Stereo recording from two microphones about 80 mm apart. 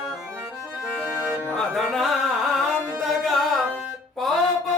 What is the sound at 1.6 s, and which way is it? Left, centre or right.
Music, centre.